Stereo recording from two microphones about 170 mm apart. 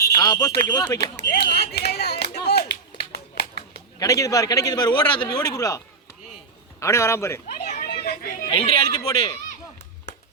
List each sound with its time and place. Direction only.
0.2 s a man's voice: 20° left (ahead or behind)
1.3 s speech: 70° left (ahead or behind)
2.3 s a sound: 70° left (ahead or behind)
4.0 s a man's voice: 20° left (ahead or behind)
7.6 s children playing: 65° left (ahead or behind)
8.4 s a man's voice: 30° left (ahead or behind)